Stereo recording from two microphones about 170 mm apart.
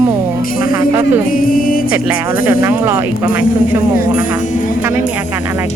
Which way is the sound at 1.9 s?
15° right (ahead or behind).